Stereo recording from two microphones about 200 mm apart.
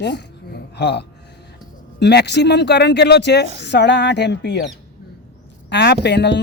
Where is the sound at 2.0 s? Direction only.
55° left (ahead or behind).